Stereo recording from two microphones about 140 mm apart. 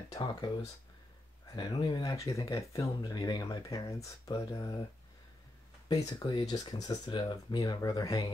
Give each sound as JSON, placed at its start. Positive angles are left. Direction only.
{"t": 0.1, "sound": "speech", "side_deg": 30}
{"t": 5.9, "sound": "speech", "side_deg": 25}